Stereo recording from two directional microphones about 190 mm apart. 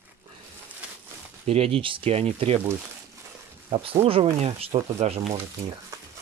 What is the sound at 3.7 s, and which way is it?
Speech, 30° right (ahead or behind).